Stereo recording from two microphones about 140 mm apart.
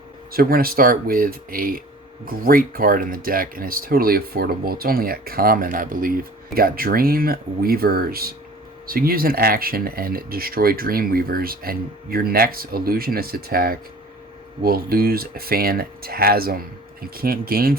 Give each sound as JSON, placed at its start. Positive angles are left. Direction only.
{"t": 0.3, "sound": "speech", "side_deg": -90}